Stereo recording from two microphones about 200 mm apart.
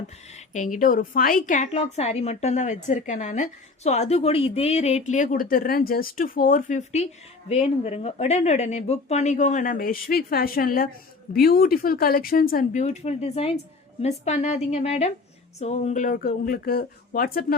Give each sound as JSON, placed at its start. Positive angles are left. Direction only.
{"t": 0.5, "sound": "a woman's voice", "side_deg": 40}